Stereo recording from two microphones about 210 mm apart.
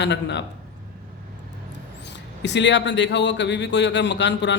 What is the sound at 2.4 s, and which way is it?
A man's voice, 55° left (ahead or behind).